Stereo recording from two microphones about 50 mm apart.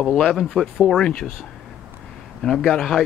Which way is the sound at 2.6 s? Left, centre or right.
Centre.